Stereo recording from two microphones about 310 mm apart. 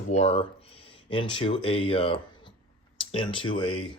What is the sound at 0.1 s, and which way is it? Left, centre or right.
Speech, centre.